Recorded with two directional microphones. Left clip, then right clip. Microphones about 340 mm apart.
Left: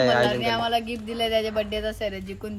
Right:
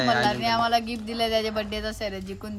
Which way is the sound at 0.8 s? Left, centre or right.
Right.